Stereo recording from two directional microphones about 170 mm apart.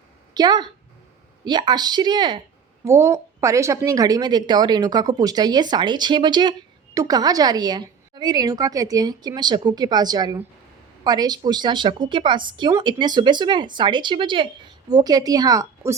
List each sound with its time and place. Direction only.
0.3 s a woman's voice: 25° right (ahead or behind)